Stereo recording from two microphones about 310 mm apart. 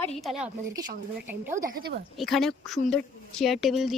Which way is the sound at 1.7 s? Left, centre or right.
Right.